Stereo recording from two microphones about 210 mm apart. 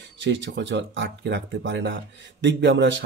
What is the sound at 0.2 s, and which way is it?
Speech, 60° right (ahead or behind).